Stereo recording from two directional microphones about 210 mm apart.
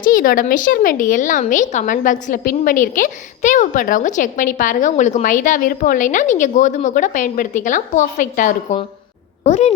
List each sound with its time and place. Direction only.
0.0 s a child's voice: 45° left (ahead or behind)